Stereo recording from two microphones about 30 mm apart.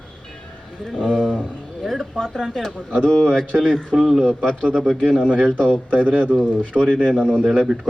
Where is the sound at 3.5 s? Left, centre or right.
Centre.